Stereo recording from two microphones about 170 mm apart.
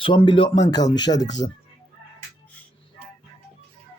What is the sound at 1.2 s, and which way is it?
Speech, 90° left.